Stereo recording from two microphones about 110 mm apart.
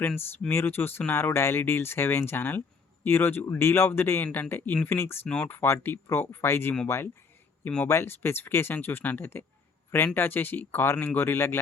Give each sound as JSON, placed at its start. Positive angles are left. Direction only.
{"t": 0.0, "sound": "speech", "side_deg": 15}
{"t": 5.3, "sound": "speech", "side_deg": 10}
{"t": 5.5, "sound": "speech", "side_deg": 20}